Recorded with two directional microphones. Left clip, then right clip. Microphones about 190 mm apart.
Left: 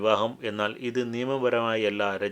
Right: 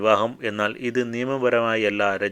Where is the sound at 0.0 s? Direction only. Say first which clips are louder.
Right 5 dB; 20° right (ahead or behind).